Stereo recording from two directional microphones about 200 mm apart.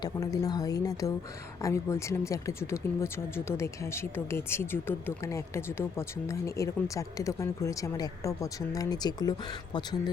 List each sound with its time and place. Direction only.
0.0 s speech: 20° left (ahead or behind)